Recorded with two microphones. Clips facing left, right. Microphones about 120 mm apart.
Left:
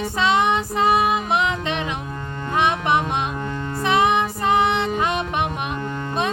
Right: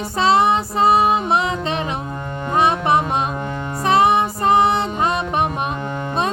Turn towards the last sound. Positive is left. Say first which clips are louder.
# right 3 dB
turn(degrees=-35)  # may be behind; listen again after turning